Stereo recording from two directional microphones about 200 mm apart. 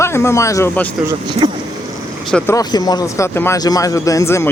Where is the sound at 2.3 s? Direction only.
15° left (ahead or behind).